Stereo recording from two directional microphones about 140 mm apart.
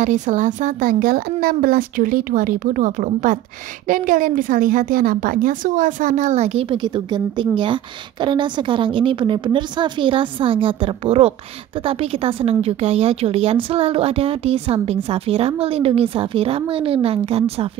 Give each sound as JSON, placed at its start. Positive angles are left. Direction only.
{"t": 0.0, "sound": "a woman's voice", "side_deg": -60}